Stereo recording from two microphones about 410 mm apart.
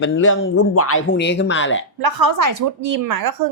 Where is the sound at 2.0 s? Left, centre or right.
Right.